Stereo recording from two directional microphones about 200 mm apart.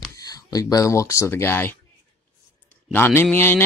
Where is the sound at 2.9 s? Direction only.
10° left (ahead or behind).